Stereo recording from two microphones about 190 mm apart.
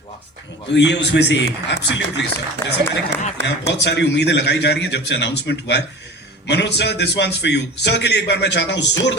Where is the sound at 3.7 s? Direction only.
65° left (ahead or behind).